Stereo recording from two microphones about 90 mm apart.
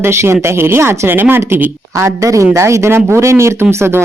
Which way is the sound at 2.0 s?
35° right (ahead or behind).